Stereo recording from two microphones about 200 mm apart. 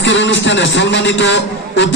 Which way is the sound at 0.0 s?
65° left (ahead or behind).